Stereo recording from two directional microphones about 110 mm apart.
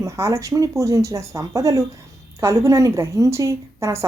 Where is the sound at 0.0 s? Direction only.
25° right (ahead or behind).